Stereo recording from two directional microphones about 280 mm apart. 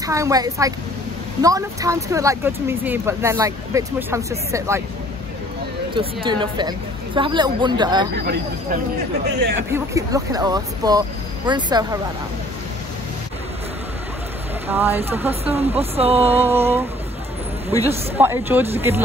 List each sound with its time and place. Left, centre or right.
0.0 s speech: centre
5.9 s speech: centre
9.2 s speech: right
9.7 s speech: centre
14.7 s speech: centre
15.2 s speech: right
16.3 s speech: centre
18.1 s speech: centre